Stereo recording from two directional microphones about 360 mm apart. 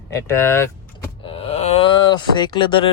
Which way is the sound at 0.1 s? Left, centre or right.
Centre.